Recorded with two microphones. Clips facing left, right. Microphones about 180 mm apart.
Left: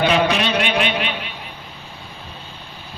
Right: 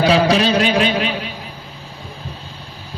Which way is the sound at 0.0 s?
35° right (ahead or behind).